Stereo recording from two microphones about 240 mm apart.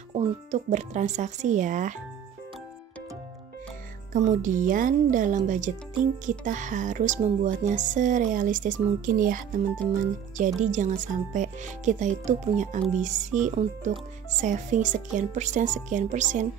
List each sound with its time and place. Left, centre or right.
0.1 s speech: right
4.1 s speech: right